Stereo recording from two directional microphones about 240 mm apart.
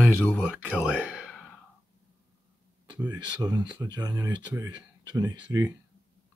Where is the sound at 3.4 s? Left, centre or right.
Centre.